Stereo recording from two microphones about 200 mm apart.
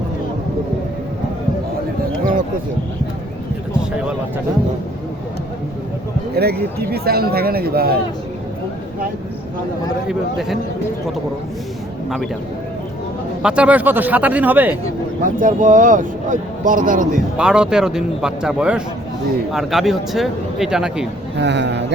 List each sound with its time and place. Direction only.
6.3 s speech: 50° right (ahead or behind)
10.1 s speech: centre (ahead or behind)
13.4 s speech: 5° right (ahead or behind)
15.2 s speech: 40° right (ahead or behind)
17.3 s speech: 5° right (ahead or behind)
21.3 s speech: 60° right (ahead or behind)